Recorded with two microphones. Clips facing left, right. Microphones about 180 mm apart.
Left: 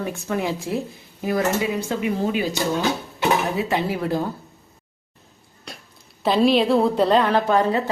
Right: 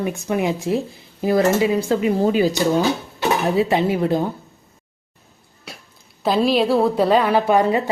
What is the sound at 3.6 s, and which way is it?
Speech, 25° right (ahead or behind).